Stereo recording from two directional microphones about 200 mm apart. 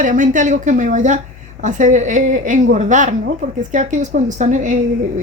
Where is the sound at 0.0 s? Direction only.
40° right (ahead or behind).